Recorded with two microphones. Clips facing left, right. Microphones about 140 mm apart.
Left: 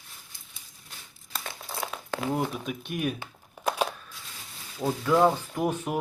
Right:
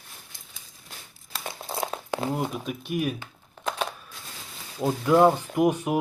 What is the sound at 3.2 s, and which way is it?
Crumpling, 10° left (ahead or behind).